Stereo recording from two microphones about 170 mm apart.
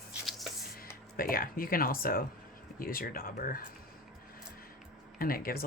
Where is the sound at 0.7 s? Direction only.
60° left (ahead or behind).